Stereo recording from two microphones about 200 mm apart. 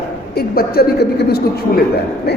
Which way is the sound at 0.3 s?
50° left (ahead or behind).